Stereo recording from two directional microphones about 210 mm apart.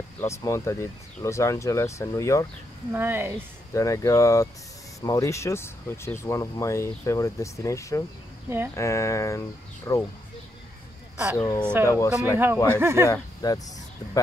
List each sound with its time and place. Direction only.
0.2 s speech: 15° left (ahead or behind)
2.9 s speech: 10° right (ahead or behind)
3.7 s speech: 15° left (ahead or behind)
11.3 s speech: 15° left (ahead or behind)
12.6 s speech: 10° right (ahead or behind)
13.0 s speech: 15° left (ahead or behind)